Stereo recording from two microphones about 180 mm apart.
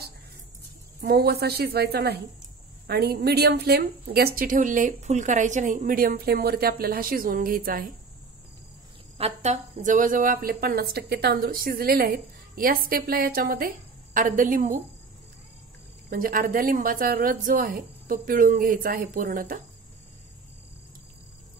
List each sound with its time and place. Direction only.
1.0 s a woman's voice: 60° right (ahead or behind)
9.2 s speech: 40° right (ahead or behind)
16.1 s speech: 50° right (ahead or behind)